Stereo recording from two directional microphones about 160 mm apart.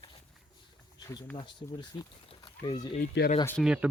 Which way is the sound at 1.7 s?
30° left (ahead or behind).